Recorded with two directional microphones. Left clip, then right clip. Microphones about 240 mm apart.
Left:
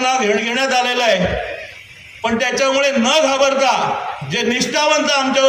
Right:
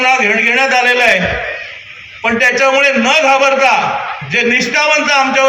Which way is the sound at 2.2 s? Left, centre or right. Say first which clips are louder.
Right 6 dB; left.